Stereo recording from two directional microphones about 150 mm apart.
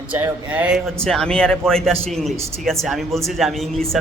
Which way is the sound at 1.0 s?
5° left (ahead or behind).